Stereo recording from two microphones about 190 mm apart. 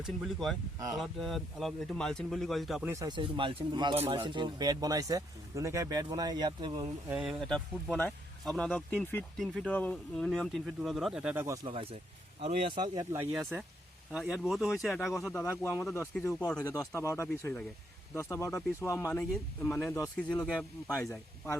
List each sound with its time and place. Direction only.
0.2 s speech: centre (ahead or behind)
2.9 s speech: 20° right (ahead or behind)
7.1 s speech: 5° right (ahead or behind)
11.6 s speech: 30° right (ahead or behind); by 13.7 s 15° right (ahead or behind)
14.1 s speech: 5° right (ahead or behind)
15.3 s speech: 10° left (ahead or behind)